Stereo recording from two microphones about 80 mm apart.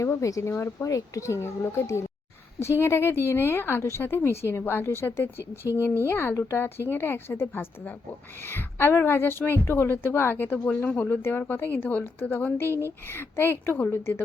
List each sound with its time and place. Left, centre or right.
0.0 s speech: left
12.6 s speech: right
13.1 s speech: left